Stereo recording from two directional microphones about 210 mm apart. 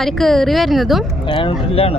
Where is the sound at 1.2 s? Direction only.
25° left (ahead or behind).